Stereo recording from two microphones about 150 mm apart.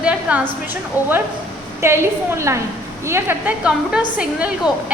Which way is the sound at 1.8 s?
15° right (ahead or behind).